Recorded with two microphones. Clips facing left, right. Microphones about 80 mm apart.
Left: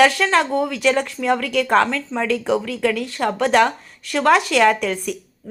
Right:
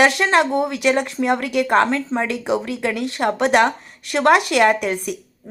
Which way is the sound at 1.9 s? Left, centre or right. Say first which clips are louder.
Even; right.